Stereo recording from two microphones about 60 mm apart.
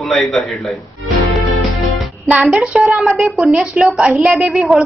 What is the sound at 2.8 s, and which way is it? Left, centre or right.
Speech, centre.